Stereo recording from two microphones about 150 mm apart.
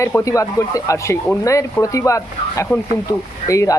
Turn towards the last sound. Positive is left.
turn(degrees=20)  # may be behind; listen again after turning